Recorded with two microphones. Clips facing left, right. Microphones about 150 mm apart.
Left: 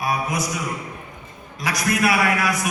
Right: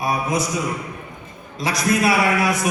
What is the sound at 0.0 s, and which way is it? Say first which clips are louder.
Speech: right 2 dB; 25° right (ahead or behind).